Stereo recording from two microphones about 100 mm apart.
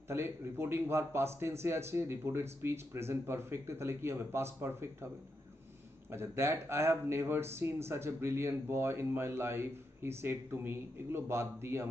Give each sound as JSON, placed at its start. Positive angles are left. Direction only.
{"t": 0.1, "sound": "speech", "side_deg": -25}
{"t": 6.0, "sound": "speech", "side_deg": -25}